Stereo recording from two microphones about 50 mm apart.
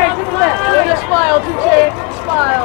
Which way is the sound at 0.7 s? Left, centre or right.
Centre.